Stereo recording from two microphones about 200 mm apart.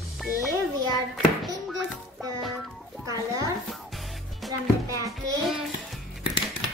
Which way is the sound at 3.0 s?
20° right (ahead or behind).